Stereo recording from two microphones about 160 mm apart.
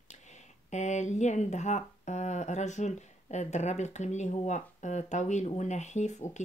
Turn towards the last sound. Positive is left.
turn(degrees=45)  # may be behind; listen again after turning